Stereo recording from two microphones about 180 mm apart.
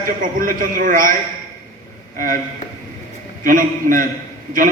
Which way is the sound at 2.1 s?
50° right (ahead or behind).